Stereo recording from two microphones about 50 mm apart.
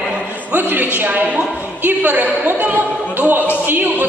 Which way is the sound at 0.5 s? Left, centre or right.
Right.